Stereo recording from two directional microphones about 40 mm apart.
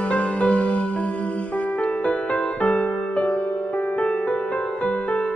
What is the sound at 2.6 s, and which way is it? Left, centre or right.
Music, left.